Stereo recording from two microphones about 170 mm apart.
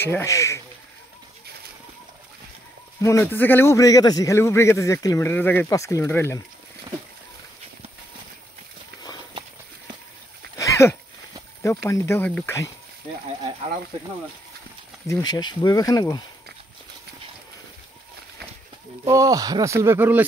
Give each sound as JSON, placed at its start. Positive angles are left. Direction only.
{"t": 0.0, "sound": "a man's voice", "side_deg": 15}
{"t": 3.0, "sound": "a man's voice", "side_deg": 15}
{"t": 10.6, "sound": "a sound", "side_deg": 15}
{"t": 11.6, "sound": "a man's voice", "side_deg": 15}
{"t": 15.0, "sound": "speech", "side_deg": 25}
{"t": 19.0, "sound": "speech", "side_deg": -20}